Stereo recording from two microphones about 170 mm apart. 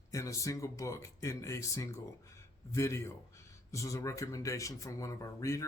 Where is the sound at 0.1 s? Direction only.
20° left (ahead or behind).